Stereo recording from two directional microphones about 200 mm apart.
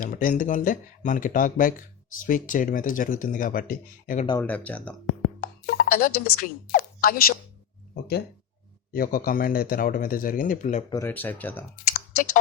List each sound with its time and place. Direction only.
0.0 s speech: 45° left (ahead or behind)
4.4 s speech: 5° left (ahead or behind)
5.0 s music: 40° left (ahead or behind)
6.2 s speech: 45° left (ahead or behind)
8.9 s speech: 45° left (ahead or behind)
10.8 s speech: 15° left (ahead or behind)